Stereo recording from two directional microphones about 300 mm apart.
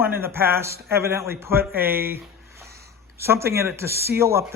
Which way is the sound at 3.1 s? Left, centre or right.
Centre.